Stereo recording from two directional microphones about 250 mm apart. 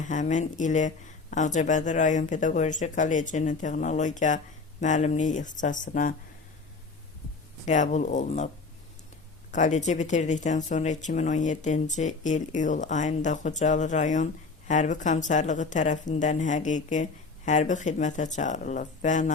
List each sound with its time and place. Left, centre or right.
0.0 s speech: left
7.6 s speech: left
9.5 s speech: left